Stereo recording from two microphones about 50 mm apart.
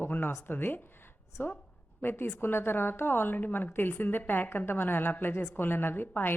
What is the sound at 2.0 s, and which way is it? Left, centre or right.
A woman's voice, left.